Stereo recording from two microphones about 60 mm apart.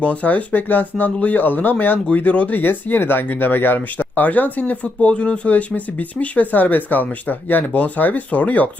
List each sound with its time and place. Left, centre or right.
0.0 s speech: left
2.6 s speech: left